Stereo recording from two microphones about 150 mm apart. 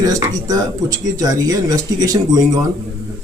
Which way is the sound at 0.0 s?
25° right (ahead or behind).